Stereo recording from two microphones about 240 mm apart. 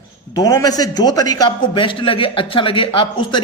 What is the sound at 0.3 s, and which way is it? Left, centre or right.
A man's voice, centre.